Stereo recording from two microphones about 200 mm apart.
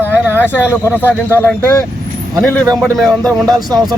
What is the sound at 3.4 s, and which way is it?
Speech, 20° right (ahead or behind).